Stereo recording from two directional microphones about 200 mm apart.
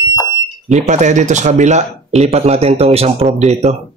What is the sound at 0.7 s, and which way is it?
Speech, 35° right (ahead or behind).